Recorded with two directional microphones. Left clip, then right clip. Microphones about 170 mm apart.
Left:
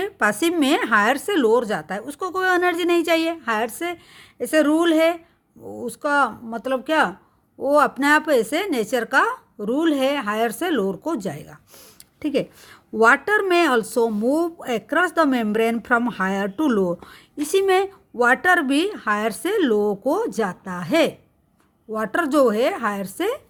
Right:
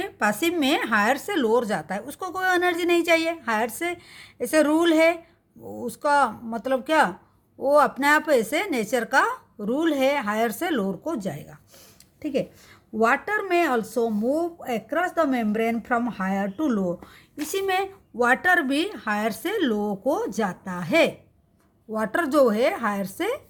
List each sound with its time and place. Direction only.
0.0 s speech: 35° left (ahead or behind)